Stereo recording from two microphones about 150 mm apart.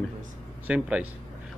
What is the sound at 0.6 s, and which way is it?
Speech, 10° right (ahead or behind).